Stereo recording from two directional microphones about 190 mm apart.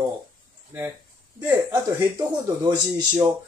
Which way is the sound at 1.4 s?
15° right (ahead or behind).